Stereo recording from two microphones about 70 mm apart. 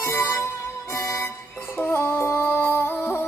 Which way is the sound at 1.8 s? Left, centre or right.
Left.